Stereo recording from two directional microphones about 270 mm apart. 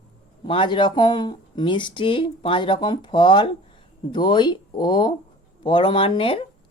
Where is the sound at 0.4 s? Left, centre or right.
Centre.